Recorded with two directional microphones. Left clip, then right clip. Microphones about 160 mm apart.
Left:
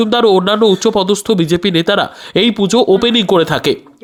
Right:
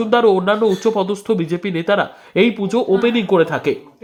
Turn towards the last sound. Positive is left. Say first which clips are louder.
# left 4 dB
turn(degrees=30)  # may be behind; listen again after turning